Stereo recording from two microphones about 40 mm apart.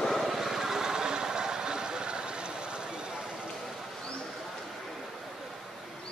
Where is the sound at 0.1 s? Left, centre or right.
Centre; by 3.3 s right.